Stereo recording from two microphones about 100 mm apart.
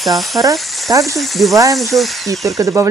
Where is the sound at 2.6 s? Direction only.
30° right (ahead or behind).